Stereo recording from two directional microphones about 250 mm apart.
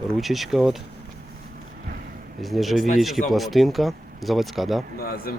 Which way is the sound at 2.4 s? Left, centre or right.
Centre.